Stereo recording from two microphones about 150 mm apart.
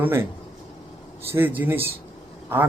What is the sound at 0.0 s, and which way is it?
Speech, 15° right (ahead or behind).